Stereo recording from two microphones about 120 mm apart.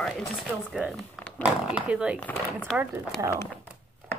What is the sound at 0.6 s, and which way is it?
Speech, 5° right (ahead or behind).